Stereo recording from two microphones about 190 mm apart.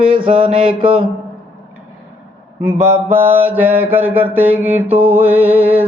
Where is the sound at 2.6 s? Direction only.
15° right (ahead or behind).